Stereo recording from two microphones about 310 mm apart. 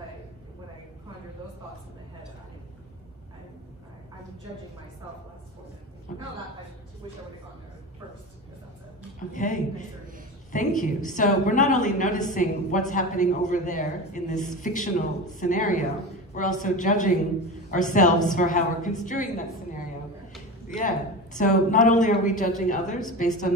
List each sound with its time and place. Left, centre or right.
9.3 s a woman's voice: left
20.7 s a woman's voice: left